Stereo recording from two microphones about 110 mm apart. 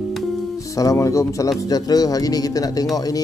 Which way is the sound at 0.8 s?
30° left (ahead or behind).